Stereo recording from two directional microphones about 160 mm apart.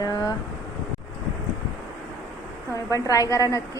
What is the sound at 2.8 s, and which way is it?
Speech, 20° left (ahead or behind).